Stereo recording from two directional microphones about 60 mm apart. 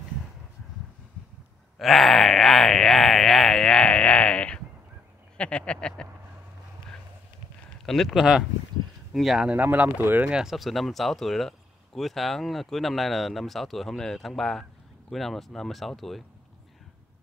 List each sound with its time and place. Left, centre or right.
1.8 s speech: centre
7.8 s speech: centre
8.1 s speech: centre
9.5 s speech: right
10.3 s speech: centre